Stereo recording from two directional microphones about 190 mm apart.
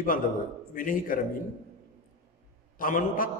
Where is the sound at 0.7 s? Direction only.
45° left (ahead or behind).